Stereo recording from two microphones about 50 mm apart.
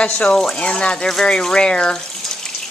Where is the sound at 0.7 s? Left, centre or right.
Left.